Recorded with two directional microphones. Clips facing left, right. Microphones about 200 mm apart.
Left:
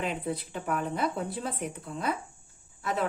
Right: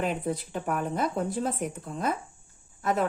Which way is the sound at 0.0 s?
45° right (ahead or behind).